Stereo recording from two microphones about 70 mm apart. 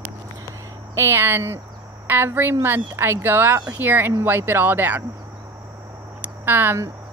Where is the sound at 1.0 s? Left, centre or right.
Right.